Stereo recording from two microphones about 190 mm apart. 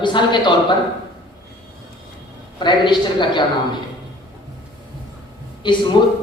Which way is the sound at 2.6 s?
25° left (ahead or behind).